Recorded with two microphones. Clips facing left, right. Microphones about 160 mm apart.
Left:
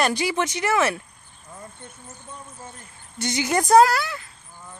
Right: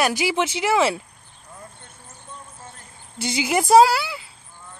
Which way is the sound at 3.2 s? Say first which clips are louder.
Right 1 dB; 10° right (ahead or behind).